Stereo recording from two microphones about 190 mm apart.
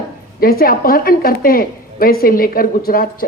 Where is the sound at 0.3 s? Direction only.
50° left (ahead or behind).